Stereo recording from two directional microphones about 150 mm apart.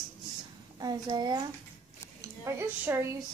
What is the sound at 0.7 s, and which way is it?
Speech, 25° right (ahead or behind).